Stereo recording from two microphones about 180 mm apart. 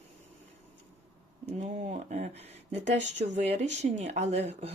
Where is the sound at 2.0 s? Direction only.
40° right (ahead or behind).